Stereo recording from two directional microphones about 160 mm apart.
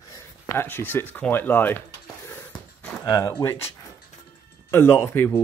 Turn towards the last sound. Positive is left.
turn(degrees=15)  # may be behind; listen again after turning